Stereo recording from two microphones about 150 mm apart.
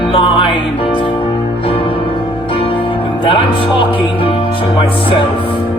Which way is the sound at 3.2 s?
35° left (ahead or behind).